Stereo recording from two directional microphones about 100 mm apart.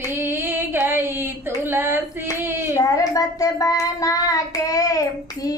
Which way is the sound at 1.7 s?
20° right (ahead or behind).